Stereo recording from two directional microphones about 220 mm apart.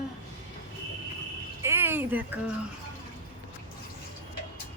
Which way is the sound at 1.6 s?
10° right (ahead or behind).